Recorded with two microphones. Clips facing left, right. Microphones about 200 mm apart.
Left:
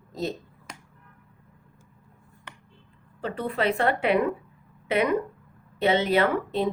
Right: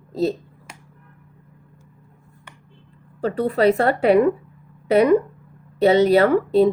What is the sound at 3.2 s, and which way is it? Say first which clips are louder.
A woman's voice: right 9 dB; 40° right (ahead or behind).